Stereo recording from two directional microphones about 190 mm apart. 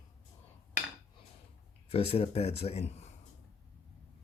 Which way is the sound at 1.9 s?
30° left (ahead or behind).